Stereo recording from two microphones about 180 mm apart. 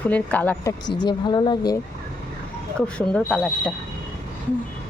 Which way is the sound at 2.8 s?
5° left (ahead or behind).